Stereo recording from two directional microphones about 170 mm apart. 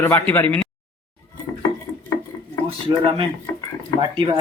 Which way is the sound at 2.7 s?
30° right (ahead or behind).